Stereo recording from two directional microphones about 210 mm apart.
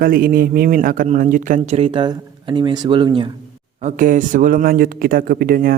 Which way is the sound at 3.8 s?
40° right (ahead or behind).